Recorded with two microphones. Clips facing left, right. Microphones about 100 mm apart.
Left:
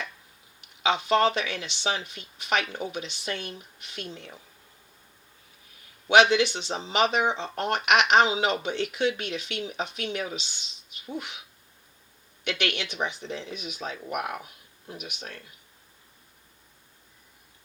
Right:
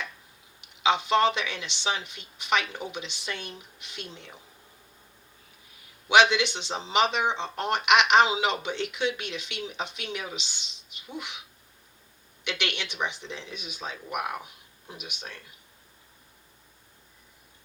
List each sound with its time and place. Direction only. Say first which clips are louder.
0.8 s speech: even; 40° left (ahead or behind)
6.1 s speech: left 1 dB; 40° left (ahead or behind)
12.5 s speech: left 2 dB; 40° left (ahead or behind)